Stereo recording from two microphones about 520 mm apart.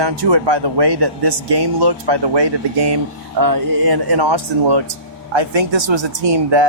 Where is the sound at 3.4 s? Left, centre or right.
Right.